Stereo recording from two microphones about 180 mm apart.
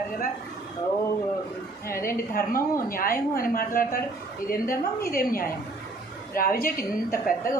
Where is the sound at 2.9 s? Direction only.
55° left (ahead or behind).